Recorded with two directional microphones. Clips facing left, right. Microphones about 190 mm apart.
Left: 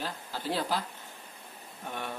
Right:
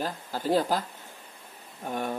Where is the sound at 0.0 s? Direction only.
45° right (ahead or behind).